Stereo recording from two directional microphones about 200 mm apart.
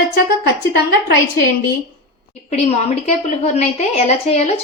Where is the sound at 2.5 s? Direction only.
35° left (ahead or behind).